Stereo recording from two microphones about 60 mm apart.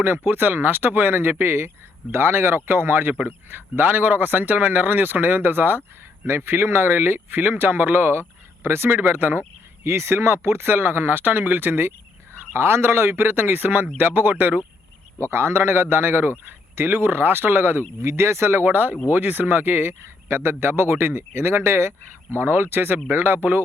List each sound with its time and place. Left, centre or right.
0.3 s speech: right
9.8 s speech: right
15.2 s speech: right